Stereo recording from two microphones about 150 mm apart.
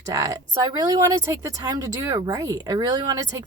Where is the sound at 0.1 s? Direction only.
20° right (ahead or behind).